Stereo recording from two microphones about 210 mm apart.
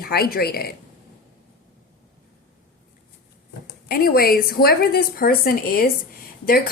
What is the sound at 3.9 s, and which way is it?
A woman's voice, 45° left (ahead or behind).